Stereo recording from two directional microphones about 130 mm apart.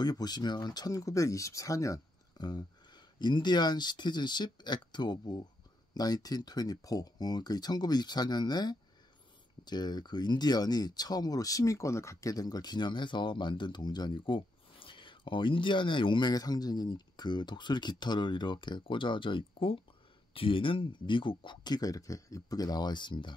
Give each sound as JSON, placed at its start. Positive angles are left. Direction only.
{"t": 0.0, "sound": "speech", "side_deg": 30}